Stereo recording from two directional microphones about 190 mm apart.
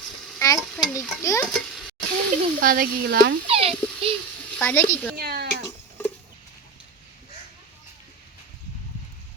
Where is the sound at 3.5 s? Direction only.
30° right (ahead or behind).